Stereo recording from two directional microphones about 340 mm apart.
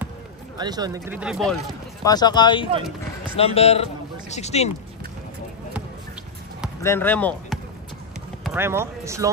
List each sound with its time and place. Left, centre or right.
0.6 s speech: centre
2.1 s speech: centre
6.8 s speech: centre
8.5 s speech: centre